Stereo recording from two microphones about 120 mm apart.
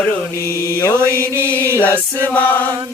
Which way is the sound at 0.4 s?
25° left (ahead or behind).